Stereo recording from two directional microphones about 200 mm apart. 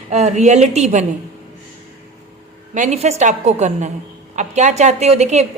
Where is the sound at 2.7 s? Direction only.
35° right (ahead or behind).